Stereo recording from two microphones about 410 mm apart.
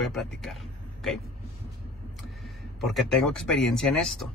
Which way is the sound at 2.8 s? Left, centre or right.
Centre.